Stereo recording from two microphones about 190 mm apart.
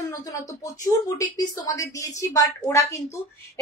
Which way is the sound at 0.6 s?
20° left (ahead or behind).